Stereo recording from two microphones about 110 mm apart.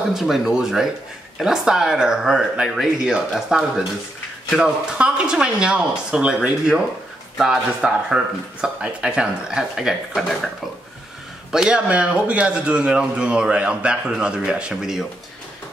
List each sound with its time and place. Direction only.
0.1 s speech: 5° right (ahead or behind)
11.5 s speech: 5° right (ahead or behind)